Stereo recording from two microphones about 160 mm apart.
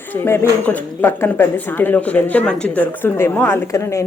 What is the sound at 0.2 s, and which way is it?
Speech, 15° left (ahead or behind).